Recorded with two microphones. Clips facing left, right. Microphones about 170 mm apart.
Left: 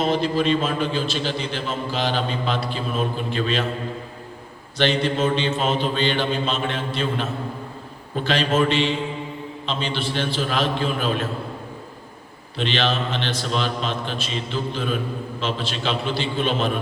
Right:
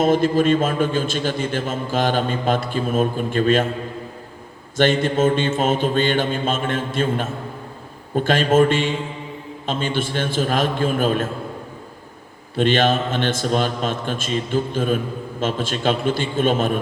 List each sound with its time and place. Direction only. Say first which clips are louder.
0.0 s a man's voice: right 4 dB; 50° right (ahead or behind)
4.8 s a man's voice: right 4 dB; 50° right (ahead or behind)
12.5 s a man's voice: right 6 dB; 50° right (ahead or behind)